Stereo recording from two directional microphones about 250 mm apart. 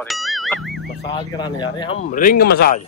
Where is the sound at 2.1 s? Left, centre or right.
Left.